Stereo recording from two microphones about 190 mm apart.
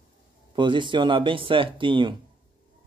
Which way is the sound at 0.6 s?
25° right (ahead or behind).